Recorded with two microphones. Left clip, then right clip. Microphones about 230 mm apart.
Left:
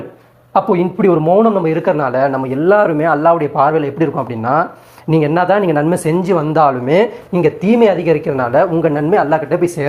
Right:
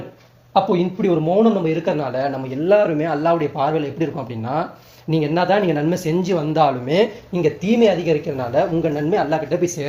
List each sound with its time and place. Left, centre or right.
1.0 s speech: centre